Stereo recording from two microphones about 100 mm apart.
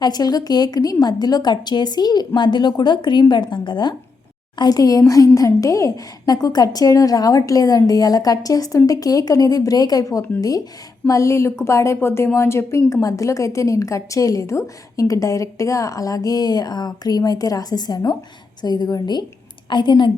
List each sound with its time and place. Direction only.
0.0 s a woman's voice: 40° left (ahead or behind)